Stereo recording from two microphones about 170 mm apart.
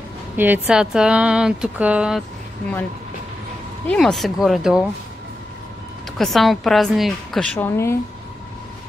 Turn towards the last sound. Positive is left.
turn(degrees=15)  # may be behind; listen again after turning